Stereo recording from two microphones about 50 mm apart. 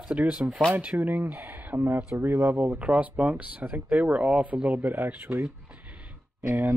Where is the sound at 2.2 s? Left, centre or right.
Right.